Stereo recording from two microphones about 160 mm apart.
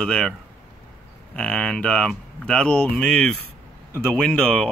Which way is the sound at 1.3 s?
5° left (ahead or behind).